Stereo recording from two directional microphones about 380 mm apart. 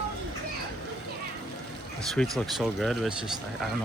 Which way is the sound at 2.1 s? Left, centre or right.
Centre.